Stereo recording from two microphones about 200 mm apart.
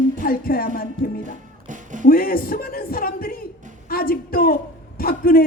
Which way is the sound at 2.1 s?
45° left (ahead or behind).